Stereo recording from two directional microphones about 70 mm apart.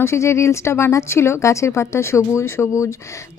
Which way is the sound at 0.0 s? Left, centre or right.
Left.